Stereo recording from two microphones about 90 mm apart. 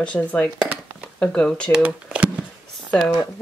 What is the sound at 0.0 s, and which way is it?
Speech, 15° left (ahead or behind).